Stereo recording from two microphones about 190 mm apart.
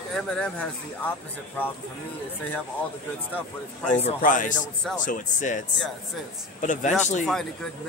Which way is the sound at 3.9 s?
40° left (ahead or behind).